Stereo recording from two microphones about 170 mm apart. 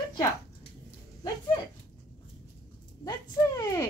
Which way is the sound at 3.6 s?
20° left (ahead or behind).